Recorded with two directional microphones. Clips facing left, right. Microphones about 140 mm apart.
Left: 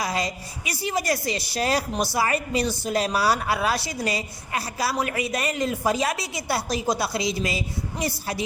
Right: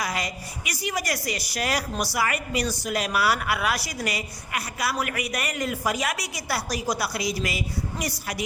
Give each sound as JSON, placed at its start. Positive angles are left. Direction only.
{"t": 0.0, "sound": "a woman's voice", "side_deg": 25}